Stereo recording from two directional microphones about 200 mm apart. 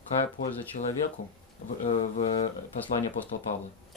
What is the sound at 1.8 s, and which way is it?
Speech, 35° left (ahead or behind).